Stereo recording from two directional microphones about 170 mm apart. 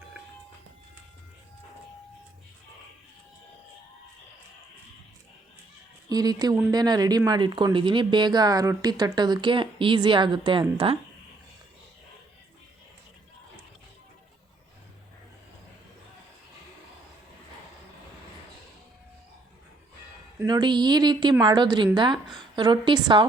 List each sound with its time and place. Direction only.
6.1 s speech: 20° right (ahead or behind)
20.4 s speech: 25° right (ahead or behind)